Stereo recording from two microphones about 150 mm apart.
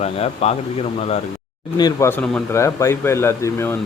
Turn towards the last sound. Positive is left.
turn(degrees=15)  # may be behind; listen again after turning